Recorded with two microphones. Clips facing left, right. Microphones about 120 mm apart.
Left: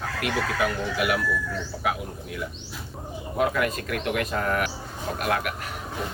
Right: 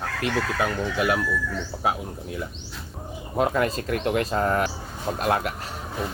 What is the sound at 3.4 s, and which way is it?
Speech, 30° right (ahead or behind).